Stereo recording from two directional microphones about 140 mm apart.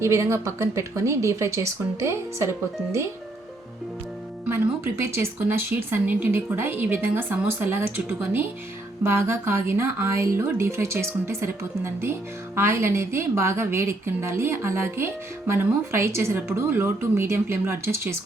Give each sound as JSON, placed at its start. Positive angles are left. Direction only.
{"t": 0.0, "sound": "speech", "side_deg": -20}
{"t": 4.4, "sound": "a woman's voice", "side_deg": -15}